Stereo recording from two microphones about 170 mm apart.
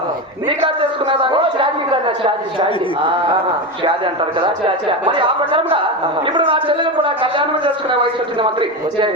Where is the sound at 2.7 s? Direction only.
30° left (ahead or behind).